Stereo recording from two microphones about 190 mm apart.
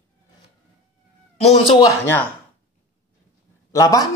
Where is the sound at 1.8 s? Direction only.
10° left (ahead or behind).